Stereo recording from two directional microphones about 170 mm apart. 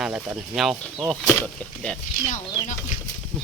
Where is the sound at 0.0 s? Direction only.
Centre (ahead or behind).